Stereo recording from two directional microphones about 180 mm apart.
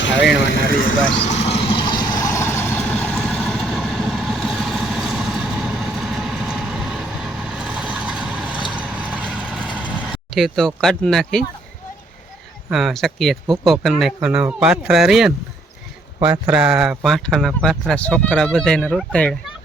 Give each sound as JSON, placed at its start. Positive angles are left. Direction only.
{"t": 0.0, "sound": "vehicle", "side_deg": 85}
{"t": 1.1, "sound": "vehicle", "side_deg": 35}
{"t": 12.7, "sound": "speech", "side_deg": 0}
{"t": 16.5, "sound": "speech", "side_deg": -5}